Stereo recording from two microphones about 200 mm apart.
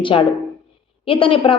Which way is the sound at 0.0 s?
25° left (ahead or behind).